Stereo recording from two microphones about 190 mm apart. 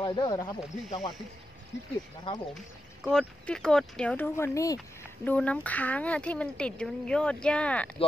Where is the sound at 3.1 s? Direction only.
5° left (ahead or behind).